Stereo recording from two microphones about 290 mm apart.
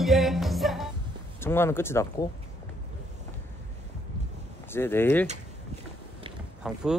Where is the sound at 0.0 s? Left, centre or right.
Centre.